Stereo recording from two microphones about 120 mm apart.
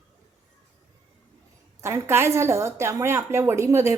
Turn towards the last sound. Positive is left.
turn(degrees=-25)  # may be behind; listen again after turning